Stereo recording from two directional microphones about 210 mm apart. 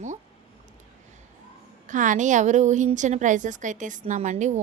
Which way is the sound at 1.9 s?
35° right (ahead or behind).